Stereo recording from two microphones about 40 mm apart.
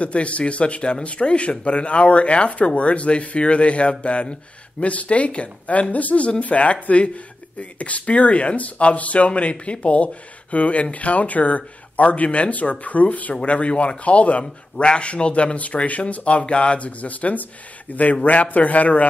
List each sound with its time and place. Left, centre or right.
0.0 s speech: left